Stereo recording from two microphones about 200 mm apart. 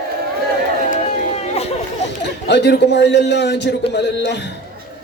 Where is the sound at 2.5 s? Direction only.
60° left (ahead or behind).